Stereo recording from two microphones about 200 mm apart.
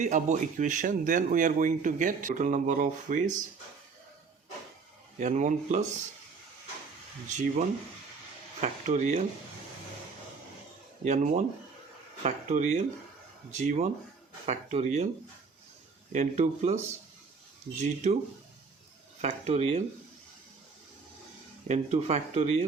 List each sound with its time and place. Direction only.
0.0 s a man's voice: 35° right (ahead or behind)
5.2 s a man's voice: 40° right (ahead or behind)
7.3 s a man's voice: 40° right (ahead or behind)
8.6 s a man's voice: 35° right (ahead or behind)
11.0 s a man's voice: 35° right (ahead or behind)
16.1 s a man's voice: 35° right (ahead or behind)
17.8 s a man's voice: 35° right (ahead or behind)
19.2 s a man's voice: 30° right (ahead or behind)
21.7 s a man's voice: 35° right (ahead or behind)